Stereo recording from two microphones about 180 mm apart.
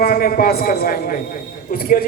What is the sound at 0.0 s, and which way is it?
A man's voice, 55° left (ahead or behind).